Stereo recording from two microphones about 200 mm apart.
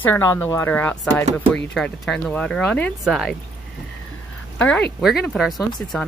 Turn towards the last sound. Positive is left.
turn(degrees=0)  # may be behind; listen again after turning